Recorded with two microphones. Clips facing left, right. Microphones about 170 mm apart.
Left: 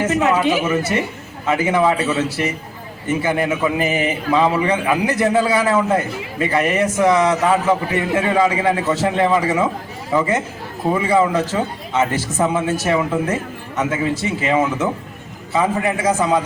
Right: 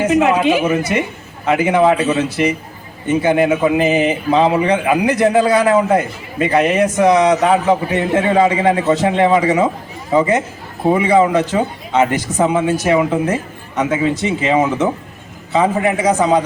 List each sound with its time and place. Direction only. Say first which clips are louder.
0.0 s a man's voice: right 3 dB; 15° right (ahead or behind)
16.0 s a man's voice: right 3 dB; 20° right (ahead or behind)